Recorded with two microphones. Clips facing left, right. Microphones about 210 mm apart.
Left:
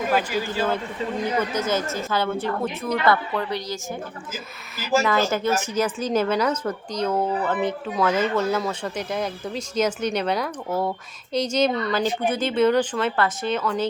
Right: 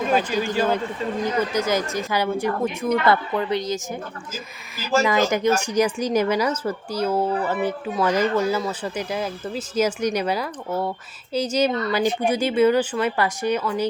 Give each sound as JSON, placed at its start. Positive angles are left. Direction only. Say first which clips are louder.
{"t": 0.3, "sound": "a woman's voice", "louder": "right 3 dB", "side_deg": -15}
{"t": 5.0, "sound": "speech", "louder": "right 2 dB", "side_deg": -15}